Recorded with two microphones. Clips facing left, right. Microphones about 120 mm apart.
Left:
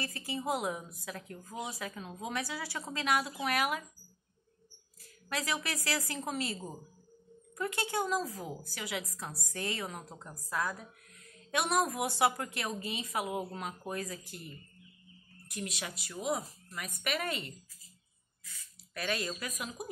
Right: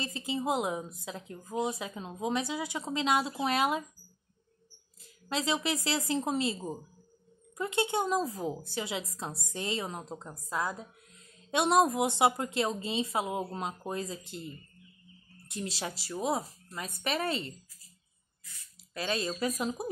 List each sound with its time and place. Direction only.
0.0 s a woman's voice: 20° right (ahead or behind)
5.3 s a woman's voice: 25° right (ahead or behind)
18.9 s a woman's voice: 25° right (ahead or behind)